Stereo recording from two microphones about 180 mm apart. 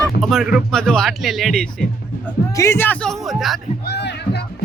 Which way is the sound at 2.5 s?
15° left (ahead or behind).